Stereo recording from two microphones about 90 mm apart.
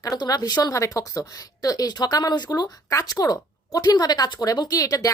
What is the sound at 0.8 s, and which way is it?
A woman's voice, 35° left (ahead or behind).